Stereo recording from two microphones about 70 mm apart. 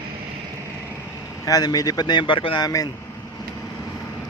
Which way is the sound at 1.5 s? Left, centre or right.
Left.